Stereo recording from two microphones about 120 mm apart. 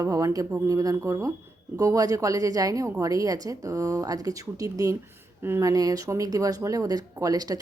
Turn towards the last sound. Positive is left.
turn(degrees=-30)  # may be behind; listen again after turning